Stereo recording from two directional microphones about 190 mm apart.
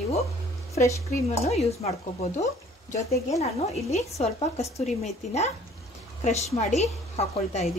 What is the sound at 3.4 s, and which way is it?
A woman's voice, 35° left (ahead or behind).